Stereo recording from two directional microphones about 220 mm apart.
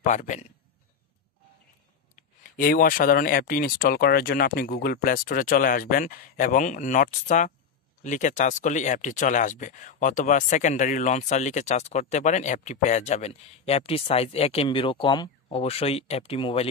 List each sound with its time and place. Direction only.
0.0 s speech: 35° left (ahead or behind)
2.1 s speech: 40° left (ahead or behind)